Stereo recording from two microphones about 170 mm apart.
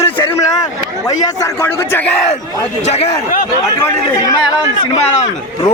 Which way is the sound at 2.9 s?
40° left (ahead or behind).